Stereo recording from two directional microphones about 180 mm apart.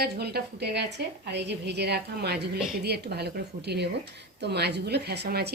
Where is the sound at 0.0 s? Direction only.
60° right (ahead or behind).